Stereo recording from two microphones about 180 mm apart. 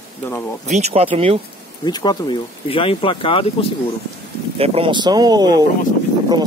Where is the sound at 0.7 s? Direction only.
40° right (ahead or behind).